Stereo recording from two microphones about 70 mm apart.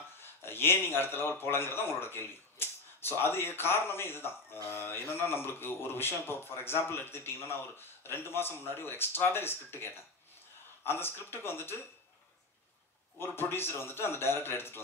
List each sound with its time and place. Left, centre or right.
0.2 s a man's voice: left
13.2 s a man's voice: left